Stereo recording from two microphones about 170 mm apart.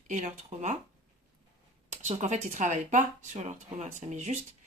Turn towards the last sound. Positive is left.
turn(degrees=-45)  # may be behind; listen again after turning